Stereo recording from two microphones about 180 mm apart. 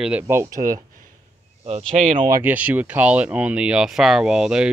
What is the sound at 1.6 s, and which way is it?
Speech, 40° right (ahead or behind).